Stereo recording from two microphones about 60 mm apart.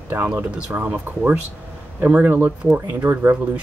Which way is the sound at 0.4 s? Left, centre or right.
Right.